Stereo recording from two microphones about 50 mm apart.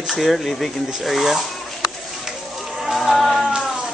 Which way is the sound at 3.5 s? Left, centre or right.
Centre.